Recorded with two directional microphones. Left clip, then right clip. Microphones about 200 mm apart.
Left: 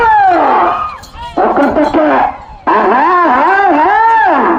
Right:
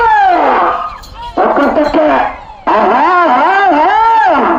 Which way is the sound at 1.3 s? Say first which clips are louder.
Even; 45° right (ahead or behind).